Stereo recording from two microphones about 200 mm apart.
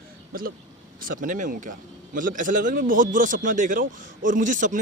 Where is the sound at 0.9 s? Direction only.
45° right (ahead or behind).